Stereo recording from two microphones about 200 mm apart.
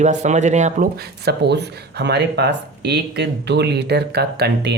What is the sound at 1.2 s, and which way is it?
Speech, 55° right (ahead or behind).